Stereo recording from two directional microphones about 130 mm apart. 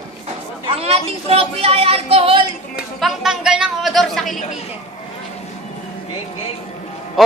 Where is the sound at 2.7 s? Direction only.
5° right (ahead or behind).